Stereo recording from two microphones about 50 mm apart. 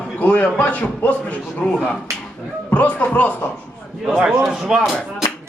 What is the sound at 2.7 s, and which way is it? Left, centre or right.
Speech, left.